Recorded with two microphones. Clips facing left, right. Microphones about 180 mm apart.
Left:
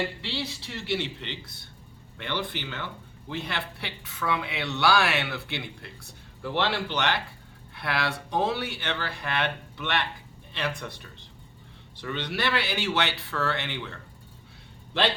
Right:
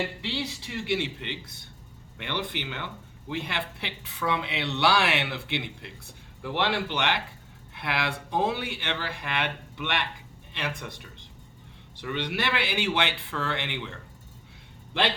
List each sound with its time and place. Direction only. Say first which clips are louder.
0.2 s speech: right 1 dB; 15° right (ahead or behind)